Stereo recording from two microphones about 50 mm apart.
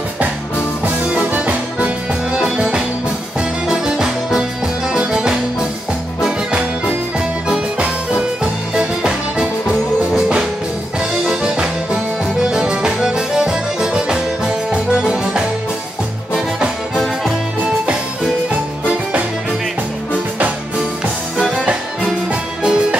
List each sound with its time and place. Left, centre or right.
0.8 s music: right
3.3 s music: centre
7.4 s music: centre
22.3 s music: right